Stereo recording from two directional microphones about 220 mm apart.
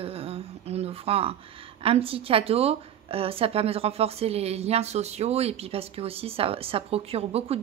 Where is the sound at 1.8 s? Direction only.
25° right (ahead or behind).